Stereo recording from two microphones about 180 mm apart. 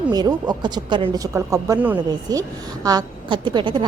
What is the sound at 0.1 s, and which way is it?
A woman's voice, 20° right (ahead or behind).